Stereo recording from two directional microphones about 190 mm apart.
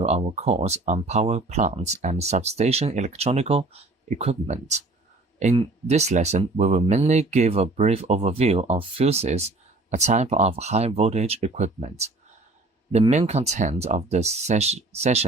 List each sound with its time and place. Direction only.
0.0 s speech: 30° right (ahead or behind)